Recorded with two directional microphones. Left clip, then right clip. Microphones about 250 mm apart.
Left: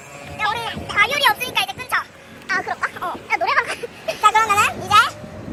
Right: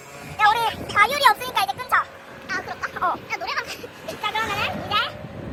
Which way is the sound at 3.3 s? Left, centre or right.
Centre.